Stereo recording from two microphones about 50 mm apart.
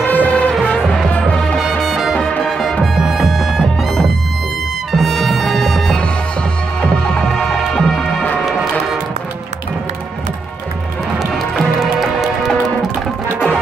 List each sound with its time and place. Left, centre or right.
0.0 s music: left
0.7 s music: centre
1.6 s music: centre
6.8 s music: centre
11.3 s music: centre